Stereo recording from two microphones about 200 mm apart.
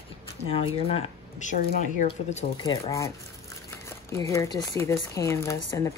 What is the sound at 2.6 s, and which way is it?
Speech, 20° left (ahead or behind).